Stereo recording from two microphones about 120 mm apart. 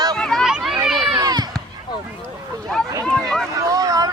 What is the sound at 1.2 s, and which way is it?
Run, 35° right (ahead or behind).